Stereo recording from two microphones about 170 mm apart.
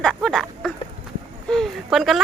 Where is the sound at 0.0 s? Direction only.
Centre (ahead or behind).